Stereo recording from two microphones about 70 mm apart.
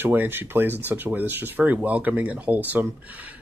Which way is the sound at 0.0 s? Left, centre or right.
Right.